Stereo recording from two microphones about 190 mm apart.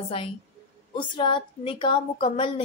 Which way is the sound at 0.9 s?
25° left (ahead or behind).